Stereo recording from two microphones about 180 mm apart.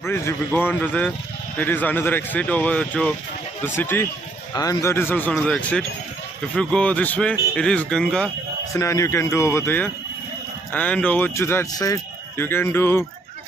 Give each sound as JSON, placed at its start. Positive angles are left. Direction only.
{"t": 0.0, "sound": "speech", "side_deg": 15}
{"t": 8.7, "sound": "speech", "side_deg": 15}